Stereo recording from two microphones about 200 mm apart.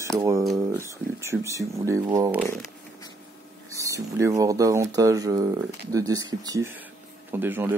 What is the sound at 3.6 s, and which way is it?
Speech, 15° right (ahead or behind).